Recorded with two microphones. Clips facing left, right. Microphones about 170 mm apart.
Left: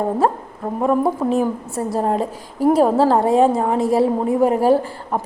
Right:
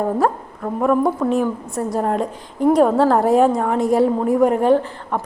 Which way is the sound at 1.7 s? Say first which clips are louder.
Even; centre (ahead or behind).